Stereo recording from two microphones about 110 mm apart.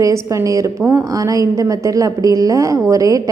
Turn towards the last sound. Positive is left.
turn(degrees=-30)  # may be behind; listen again after turning